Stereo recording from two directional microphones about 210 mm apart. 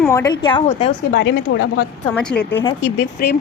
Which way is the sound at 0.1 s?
15° left (ahead or behind).